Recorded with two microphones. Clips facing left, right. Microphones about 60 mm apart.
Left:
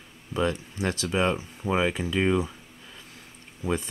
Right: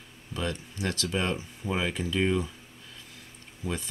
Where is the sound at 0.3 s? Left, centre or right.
Centre.